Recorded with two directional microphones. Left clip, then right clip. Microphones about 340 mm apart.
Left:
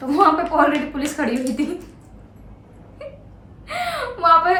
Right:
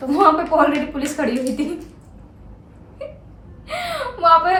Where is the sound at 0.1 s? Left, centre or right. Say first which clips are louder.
Right 1 dB; centre.